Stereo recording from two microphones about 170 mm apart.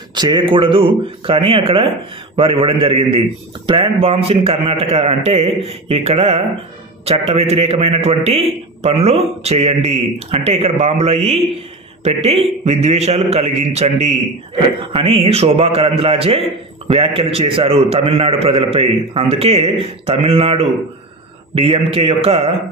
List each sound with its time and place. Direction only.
0.1 s a man's voice: 25° right (ahead or behind)
21.6 s a man's voice: 35° right (ahead or behind)